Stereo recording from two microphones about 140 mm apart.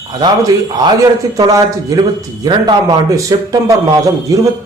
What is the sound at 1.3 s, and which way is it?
A man's voice, 30° right (ahead or behind).